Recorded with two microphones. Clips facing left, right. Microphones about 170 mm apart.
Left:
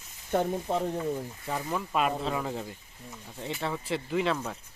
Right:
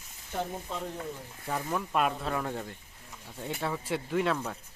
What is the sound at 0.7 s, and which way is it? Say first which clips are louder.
Speech: left 8 dB; 55° left (ahead or behind).